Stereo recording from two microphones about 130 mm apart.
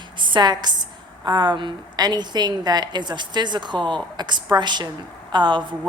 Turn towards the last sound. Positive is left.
turn(degrees=-35)  # may be behind; listen again after turning